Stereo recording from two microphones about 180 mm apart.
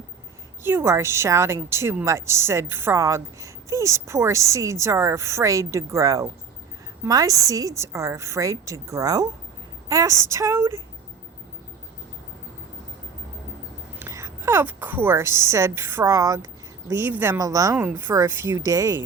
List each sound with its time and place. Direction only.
0.6 s a woman's voice: 15° right (ahead or behind)
14.0 s a woman's voice: 15° right (ahead or behind)